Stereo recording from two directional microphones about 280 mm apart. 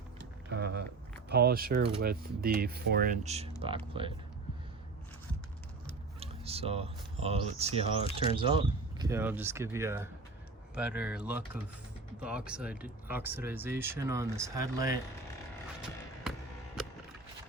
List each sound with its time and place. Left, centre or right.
0.2 s a sound: right
1.3 s speech: right
6.1 s speech: right